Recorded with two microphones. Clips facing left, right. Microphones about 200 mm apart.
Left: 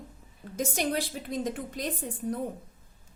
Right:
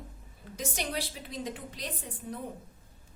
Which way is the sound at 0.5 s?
50° left (ahead or behind).